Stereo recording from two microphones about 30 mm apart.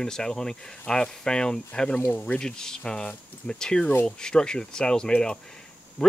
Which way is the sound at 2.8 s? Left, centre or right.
Left.